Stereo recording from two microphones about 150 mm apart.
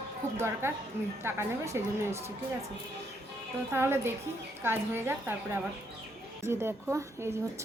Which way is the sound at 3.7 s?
15° right (ahead or behind).